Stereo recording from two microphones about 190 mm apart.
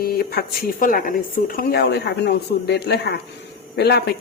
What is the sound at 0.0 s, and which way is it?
Speech, 55° left (ahead or behind).